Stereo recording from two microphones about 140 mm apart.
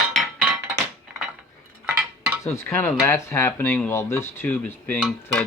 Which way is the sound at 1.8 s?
10° right (ahead or behind).